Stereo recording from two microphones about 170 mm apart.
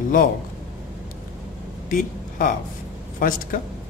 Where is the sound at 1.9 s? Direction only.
55° left (ahead or behind).